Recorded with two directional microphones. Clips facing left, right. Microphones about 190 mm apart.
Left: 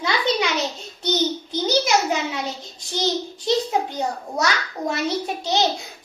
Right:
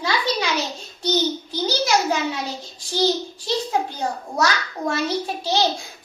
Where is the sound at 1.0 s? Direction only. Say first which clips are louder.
Right 1 dB; 20° left (ahead or behind).